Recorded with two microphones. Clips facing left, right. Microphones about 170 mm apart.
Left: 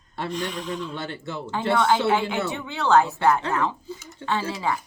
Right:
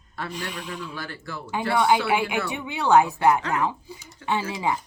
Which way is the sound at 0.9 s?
25° left (ahead or behind).